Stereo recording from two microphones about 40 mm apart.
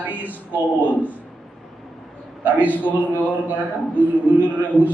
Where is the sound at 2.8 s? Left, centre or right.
Left.